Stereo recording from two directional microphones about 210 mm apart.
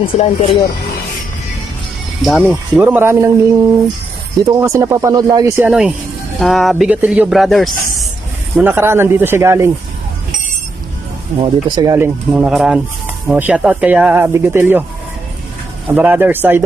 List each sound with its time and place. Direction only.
0.0 s speech: 25° left (ahead or behind)
2.2 s speech: 5° right (ahead or behind)
4.4 s speech: 15° right (ahead or behind)
11.3 s speech: 20° right (ahead or behind)
16.0 s speech: 10° right (ahead or behind)